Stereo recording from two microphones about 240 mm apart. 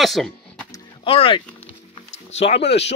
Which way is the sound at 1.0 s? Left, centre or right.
Left.